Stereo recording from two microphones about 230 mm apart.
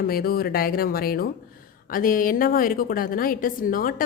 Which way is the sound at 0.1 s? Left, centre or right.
Left.